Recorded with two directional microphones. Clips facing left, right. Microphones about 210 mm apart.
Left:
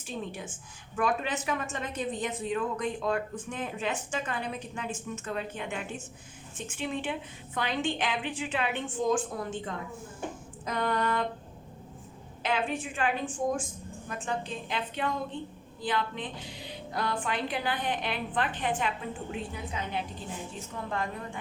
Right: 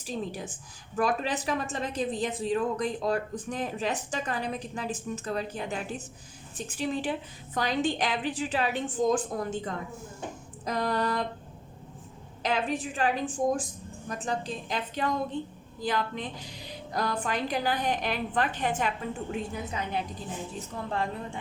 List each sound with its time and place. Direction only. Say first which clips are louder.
0.0 s a woman's voice: right 3 dB; 35° right (ahead or behind)
12.4 s a woman's voice: right 2 dB; 40° right (ahead or behind)
20.6 s a woman's voice: right 2 dB; 30° right (ahead or behind)